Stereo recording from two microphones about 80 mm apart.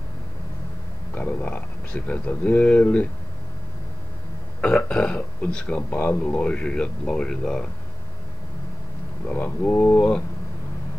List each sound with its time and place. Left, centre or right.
1.1 s a man's voice: left
4.6 s a man's voice: centre
9.3 s frog: left